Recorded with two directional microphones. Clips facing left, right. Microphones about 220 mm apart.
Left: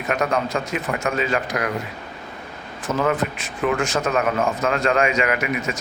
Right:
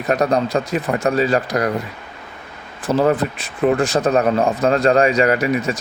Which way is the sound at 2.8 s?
35° right (ahead or behind).